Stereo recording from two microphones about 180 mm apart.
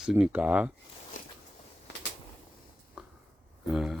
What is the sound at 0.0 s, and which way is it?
Speech, 5° right (ahead or behind).